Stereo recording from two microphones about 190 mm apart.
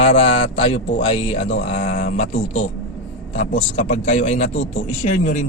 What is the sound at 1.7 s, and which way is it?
Speech, 40° left (ahead or behind).